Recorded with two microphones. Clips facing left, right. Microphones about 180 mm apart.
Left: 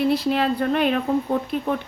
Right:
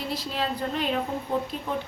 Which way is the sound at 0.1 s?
65° left (ahead or behind).